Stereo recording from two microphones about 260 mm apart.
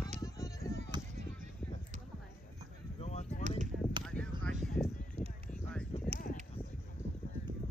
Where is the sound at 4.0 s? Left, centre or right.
Centre.